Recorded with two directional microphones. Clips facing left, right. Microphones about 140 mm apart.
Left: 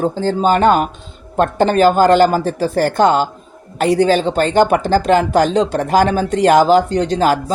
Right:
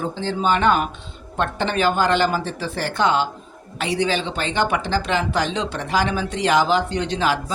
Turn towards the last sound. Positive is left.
turn(degrees=45)  # may be behind; listen again after turning